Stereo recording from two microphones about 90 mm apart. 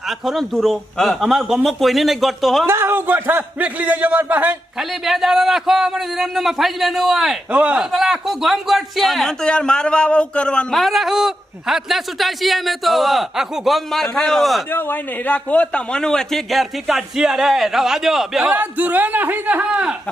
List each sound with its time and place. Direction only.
0.1 s speech: centre (ahead or behind)
2.6 s speech: 25° right (ahead or behind)
4.8 s speech: 5° right (ahead or behind)
7.5 s a man's voice: 15° right (ahead or behind)
7.9 s speech: 5° right (ahead or behind)
14.7 s speech: 25° left (ahead or behind); by 18.5 s 5° right (ahead or behind)
18.5 s a man's voice: 20° right (ahead or behind)